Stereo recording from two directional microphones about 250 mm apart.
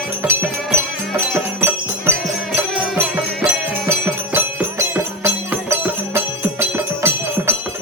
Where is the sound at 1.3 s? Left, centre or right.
Centre.